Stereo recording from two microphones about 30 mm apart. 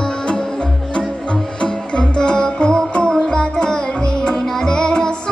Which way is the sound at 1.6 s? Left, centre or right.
Left.